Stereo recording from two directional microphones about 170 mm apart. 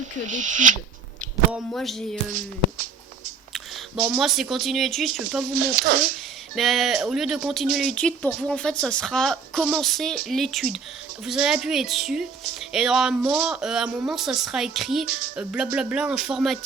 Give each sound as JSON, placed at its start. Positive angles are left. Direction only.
{"t": 0.3, "sound": "speech", "side_deg": -45}
{"t": 1.7, "sound": "a woman's voice", "side_deg": 0}
{"t": 4.0, "sound": "a woman's voice", "side_deg": 0}
{"t": 5.5, "sound": "speech", "side_deg": -60}
{"t": 6.6, "sound": "a woman's voice", "side_deg": 0}